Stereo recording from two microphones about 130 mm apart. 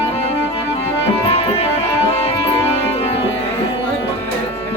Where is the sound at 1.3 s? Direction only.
50° left (ahead or behind).